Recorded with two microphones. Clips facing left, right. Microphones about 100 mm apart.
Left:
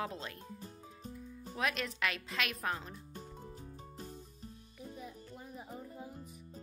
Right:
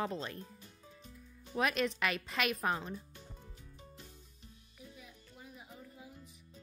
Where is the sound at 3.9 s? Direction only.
40° left (ahead or behind).